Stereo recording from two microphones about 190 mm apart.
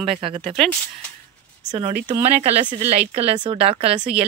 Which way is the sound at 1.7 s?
30° right (ahead or behind).